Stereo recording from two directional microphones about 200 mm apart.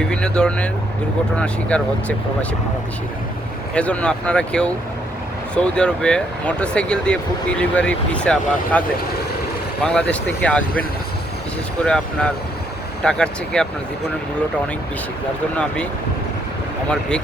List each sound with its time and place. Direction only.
0.0 s speech: 5° left (ahead or behind)
3.8 s speech: 5° left (ahead or behind)
9.8 s speech: 5° left (ahead or behind)
15.5 s speech: 5° left (ahead or behind)